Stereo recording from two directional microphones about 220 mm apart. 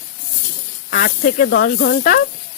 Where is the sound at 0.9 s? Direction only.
40° left (ahead or behind).